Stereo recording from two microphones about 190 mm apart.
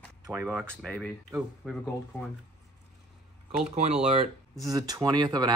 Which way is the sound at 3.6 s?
35° right (ahead or behind).